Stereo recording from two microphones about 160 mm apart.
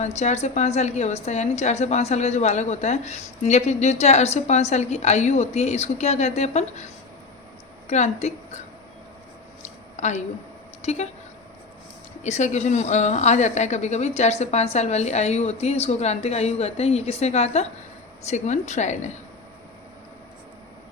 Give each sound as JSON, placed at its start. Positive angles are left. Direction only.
{"t": 0.0, "sound": "a woman's voice", "side_deg": 45}
{"t": 7.9, "sound": "a woman's voice", "side_deg": 45}
{"t": 9.6, "sound": "a sound", "side_deg": 45}
{"t": 10.8, "sound": "a woman's voice", "side_deg": 45}
{"t": 12.2, "sound": "a woman's voice", "side_deg": 45}